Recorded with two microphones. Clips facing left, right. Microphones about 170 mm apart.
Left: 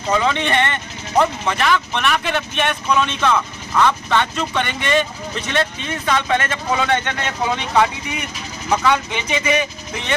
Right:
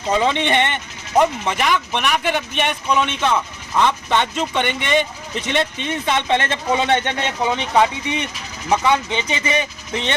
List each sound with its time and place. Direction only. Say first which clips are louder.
0.1 s speech: right 1 dB; 25° right (ahead or behind)